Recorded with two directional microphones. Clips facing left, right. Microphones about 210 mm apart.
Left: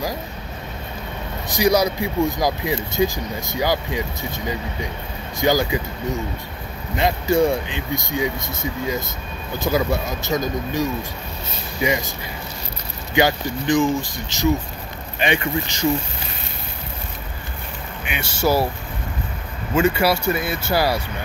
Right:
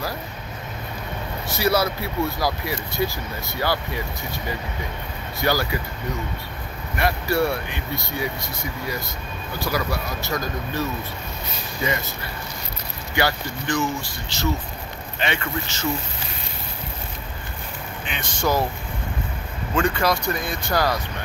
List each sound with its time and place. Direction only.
1.5 s speech: 15° left (ahead or behind)
5.4 s speech: 15° left (ahead or behind)
7.0 s speech: 20° left (ahead or behind)
13.1 s speech: 20° left (ahead or behind)
18.0 s speech: 10° left (ahead or behind)
19.7 s speech: 10° left (ahead or behind)